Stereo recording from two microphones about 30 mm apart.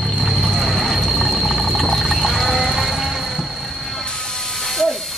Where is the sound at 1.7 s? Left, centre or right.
Centre.